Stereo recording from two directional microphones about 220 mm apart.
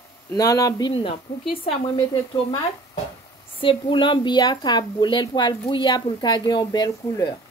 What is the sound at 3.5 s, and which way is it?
A woman's voice, 25° left (ahead or behind).